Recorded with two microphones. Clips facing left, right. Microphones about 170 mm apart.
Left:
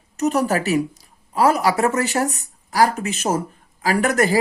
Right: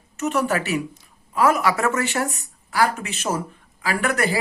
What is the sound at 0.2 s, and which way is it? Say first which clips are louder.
Speech: left 3 dB; 40° left (ahead or behind).